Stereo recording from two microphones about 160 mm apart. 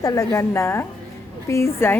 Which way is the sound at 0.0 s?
20° left (ahead or behind).